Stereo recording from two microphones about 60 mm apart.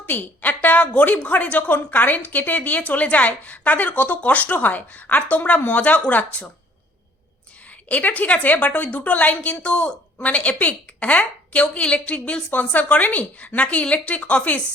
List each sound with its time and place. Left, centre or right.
0.0 s a woman's voice: left
7.7 s a woman's voice: left